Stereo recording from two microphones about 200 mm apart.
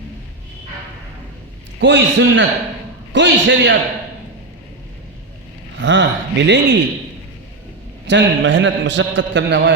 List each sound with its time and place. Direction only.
1.8 s a man's voice: 60° right (ahead or behind)
5.8 s a man's voice: 65° right (ahead or behind)
8.0 s a man's voice: 65° right (ahead or behind)